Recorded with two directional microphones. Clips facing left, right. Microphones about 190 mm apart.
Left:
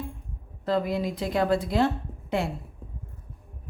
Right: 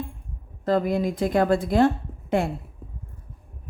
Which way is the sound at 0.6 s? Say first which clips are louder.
Right 4 dB; 50° right (ahead or behind).